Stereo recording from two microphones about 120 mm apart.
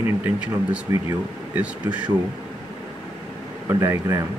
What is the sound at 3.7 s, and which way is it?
Speech, 25° right (ahead or behind).